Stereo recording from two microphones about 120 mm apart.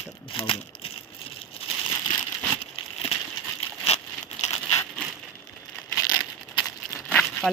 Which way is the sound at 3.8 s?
65° left (ahead or behind).